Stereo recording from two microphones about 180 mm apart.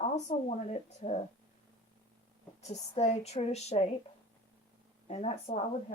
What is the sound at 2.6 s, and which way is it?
Speech, 35° left (ahead or behind).